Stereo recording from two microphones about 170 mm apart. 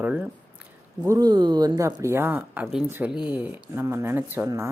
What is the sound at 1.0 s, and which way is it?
A man's voice, 20° right (ahead or behind).